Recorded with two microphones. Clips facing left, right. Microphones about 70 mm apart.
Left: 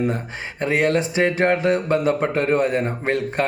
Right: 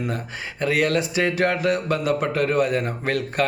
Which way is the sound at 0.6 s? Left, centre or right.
Left.